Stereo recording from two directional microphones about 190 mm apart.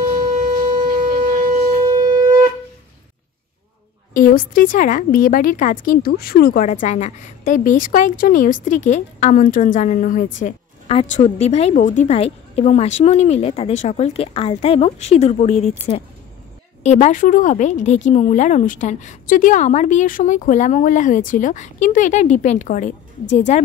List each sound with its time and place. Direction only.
0.3 s shofar: 40° right (ahead or behind)
4.1 s a woman's voice: 45° left (ahead or behind)
16.8 s a woman's voice: 35° left (ahead or behind)